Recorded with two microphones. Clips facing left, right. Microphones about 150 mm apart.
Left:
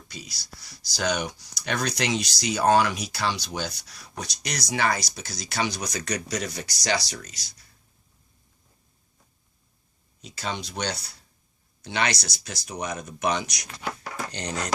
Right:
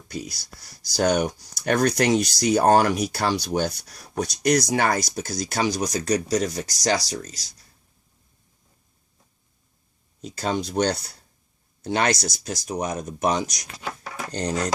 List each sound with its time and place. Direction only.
0.1 s speech: 50° right (ahead or behind)
10.2 s speech: 45° right (ahead or behind)